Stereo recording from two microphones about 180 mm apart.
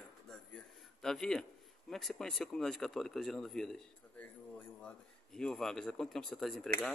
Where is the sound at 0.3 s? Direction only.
5° left (ahead or behind).